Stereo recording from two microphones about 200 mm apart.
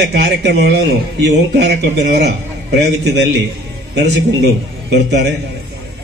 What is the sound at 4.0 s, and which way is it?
A man's voice, 60° right (ahead or behind).